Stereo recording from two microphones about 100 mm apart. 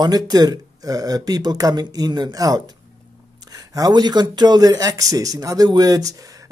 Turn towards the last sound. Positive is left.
turn(degrees=-35)  # may be behind; listen again after turning